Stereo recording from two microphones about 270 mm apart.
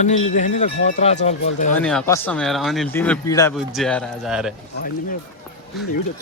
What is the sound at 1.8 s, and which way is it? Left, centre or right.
Speech, centre.